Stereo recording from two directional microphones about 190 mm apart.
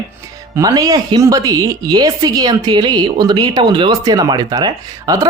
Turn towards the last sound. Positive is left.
turn(degrees=-20)  # may be behind; listen again after turning